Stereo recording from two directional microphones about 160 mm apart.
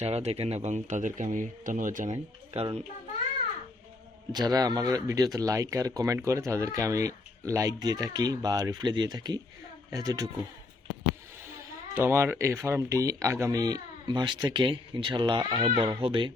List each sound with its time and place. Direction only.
0.0 s speech: 40° right (ahead or behind)
2.1 s speech: 35° right (ahead or behind)
4.3 s speech: 25° right (ahead or behind)
11.9 s speech: 15° right (ahead or behind); by 16.3 s 30° right (ahead or behind)